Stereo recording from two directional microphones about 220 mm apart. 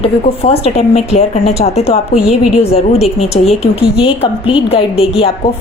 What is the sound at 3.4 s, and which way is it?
Speech, 30° left (ahead or behind).